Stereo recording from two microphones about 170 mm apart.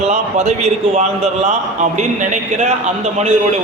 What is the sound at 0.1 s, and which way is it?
A man's voice, 45° right (ahead or behind).